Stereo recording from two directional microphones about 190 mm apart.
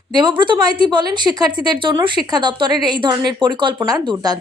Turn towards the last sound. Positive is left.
turn(degrees=-20)  # may be behind; listen again after turning